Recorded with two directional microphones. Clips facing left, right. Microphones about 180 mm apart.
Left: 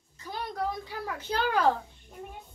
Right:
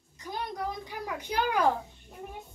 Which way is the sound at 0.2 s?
15° right (ahead or behind).